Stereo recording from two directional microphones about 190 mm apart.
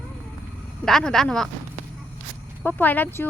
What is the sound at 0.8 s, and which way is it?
Speech, 5° left (ahead or behind).